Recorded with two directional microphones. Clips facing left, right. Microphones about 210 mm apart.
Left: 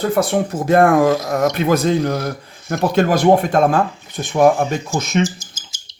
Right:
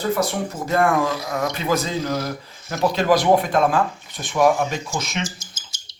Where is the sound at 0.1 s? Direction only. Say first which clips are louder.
Left 5 dB; 55° left (ahead or behind).